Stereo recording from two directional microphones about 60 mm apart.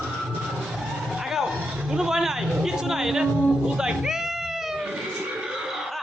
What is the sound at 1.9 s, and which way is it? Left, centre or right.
Speech, centre.